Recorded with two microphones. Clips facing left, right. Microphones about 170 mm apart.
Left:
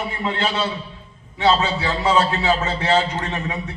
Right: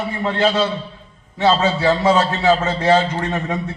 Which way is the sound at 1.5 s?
40° right (ahead or behind).